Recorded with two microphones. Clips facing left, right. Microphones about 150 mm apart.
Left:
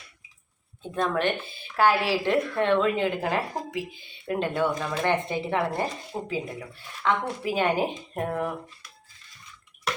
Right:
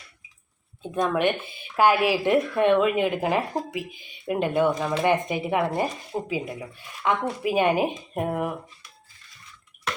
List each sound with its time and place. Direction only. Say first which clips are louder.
0.8 s speech: right 3 dB; 15° right (ahead or behind)